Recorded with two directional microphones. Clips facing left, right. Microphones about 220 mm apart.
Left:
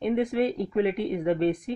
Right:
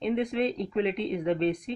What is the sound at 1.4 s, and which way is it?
Speech, 50° left (ahead or behind).